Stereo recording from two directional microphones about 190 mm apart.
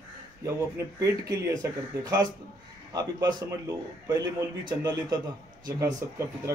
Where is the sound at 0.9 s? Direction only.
20° right (ahead or behind).